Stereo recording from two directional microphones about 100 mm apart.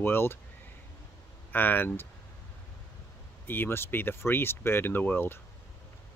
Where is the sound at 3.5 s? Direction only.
20° left (ahead or behind).